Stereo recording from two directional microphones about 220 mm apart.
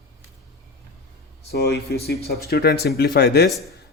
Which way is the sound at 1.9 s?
45° left (ahead or behind).